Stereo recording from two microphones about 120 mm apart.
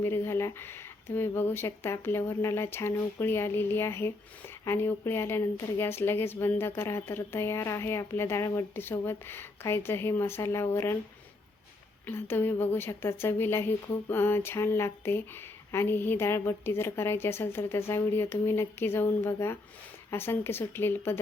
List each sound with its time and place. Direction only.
0.0 s speech: 20° left (ahead or behind)
12.0 s speech: 20° left (ahead or behind)